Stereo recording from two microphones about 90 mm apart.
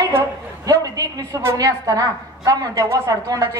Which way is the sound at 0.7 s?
40° right (ahead or behind).